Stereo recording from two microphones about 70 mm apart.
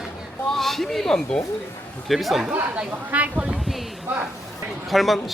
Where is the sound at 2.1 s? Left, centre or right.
Centre.